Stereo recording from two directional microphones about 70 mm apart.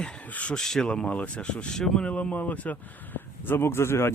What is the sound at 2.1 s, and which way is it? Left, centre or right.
Speech, centre.